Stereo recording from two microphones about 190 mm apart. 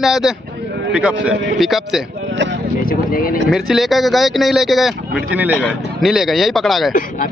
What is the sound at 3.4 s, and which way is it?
A man's voice, centre (ahead or behind).